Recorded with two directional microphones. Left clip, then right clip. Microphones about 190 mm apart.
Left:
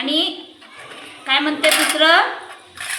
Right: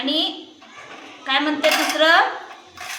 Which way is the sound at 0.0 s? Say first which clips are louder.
Left 2 dB; 20° right (ahead or behind).